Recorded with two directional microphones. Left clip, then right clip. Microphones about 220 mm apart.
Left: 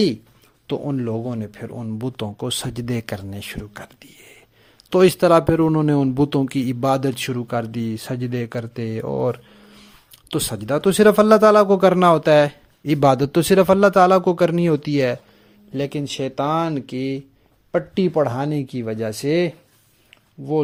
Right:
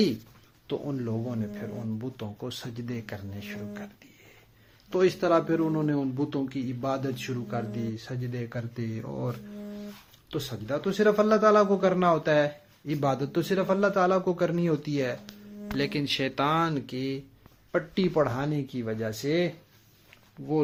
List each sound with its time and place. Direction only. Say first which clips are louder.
0.7 s a man's voice: left 8 dB; 45° left (ahead or behind)
4.9 s a man's voice: left 10 dB; 50° left (ahead or behind)
15.8 s speech: left 4 dB; 30° left (ahead or behind)